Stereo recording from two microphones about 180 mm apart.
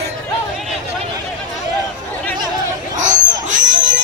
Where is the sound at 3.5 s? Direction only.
45° right (ahead or behind).